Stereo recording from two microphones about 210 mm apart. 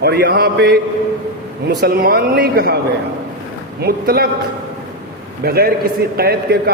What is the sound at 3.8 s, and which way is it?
Speech, 50° right (ahead or behind).